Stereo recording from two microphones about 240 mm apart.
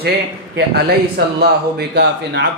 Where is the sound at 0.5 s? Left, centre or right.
Right.